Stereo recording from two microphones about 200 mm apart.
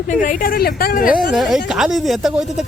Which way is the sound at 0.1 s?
40° left (ahead or behind).